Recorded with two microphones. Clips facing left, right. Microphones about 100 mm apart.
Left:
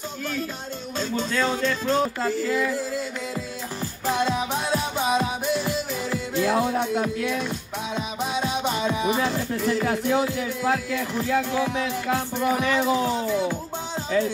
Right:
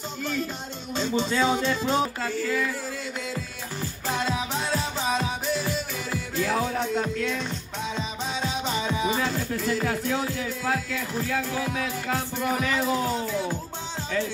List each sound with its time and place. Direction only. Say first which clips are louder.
0.9 s speech: right 1 dB; centre (ahead or behind)
4.3 s music: left 3 dB; 10° left (ahead or behind)
6.3 s music: left 4 dB; 15° left (ahead or behind)
9.7 s speech: left 4 dB; 15° left (ahead or behind)
12.1 s speech: left 4 dB; 5° left (ahead or behind)